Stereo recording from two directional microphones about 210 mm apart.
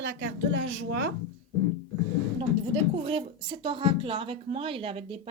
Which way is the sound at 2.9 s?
30° right (ahead or behind).